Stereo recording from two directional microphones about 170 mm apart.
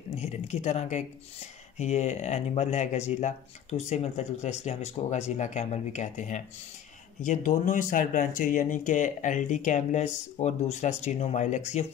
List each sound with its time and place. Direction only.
0.2 s speech: 45° left (ahead or behind)